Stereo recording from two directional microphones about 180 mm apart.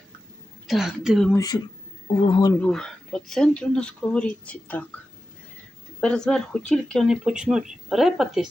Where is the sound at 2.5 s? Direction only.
5° left (ahead or behind).